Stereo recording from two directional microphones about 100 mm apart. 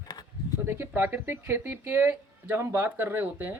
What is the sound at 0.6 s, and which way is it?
Speech, 20° right (ahead or behind).